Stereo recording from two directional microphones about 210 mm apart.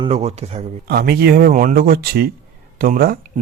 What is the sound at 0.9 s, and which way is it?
Speech, 50° right (ahead or behind).